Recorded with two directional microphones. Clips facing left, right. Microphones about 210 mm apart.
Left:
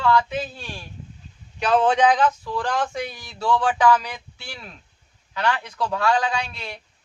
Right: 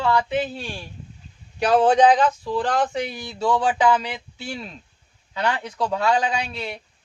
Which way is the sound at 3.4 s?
20° right (ahead or behind).